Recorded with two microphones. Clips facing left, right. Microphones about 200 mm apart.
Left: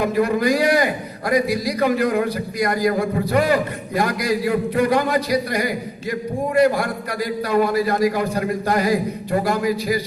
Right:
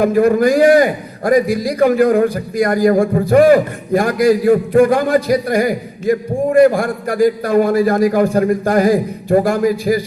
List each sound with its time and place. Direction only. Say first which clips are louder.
0.0 s a man's voice: right 7 dB; 50° right (ahead or behind)